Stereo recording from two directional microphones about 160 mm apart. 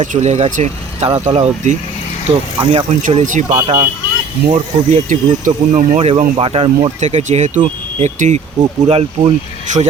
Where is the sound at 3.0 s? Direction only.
55° right (ahead or behind).